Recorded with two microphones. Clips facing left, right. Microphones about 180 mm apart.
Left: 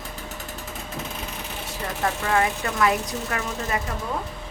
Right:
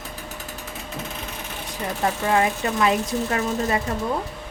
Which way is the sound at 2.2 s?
20° right (ahead or behind).